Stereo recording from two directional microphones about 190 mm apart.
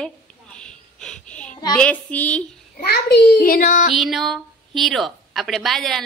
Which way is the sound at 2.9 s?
55° left (ahead or behind).